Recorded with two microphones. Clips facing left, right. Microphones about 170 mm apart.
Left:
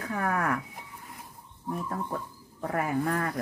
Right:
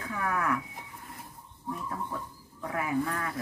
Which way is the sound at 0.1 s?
45° left (ahead or behind).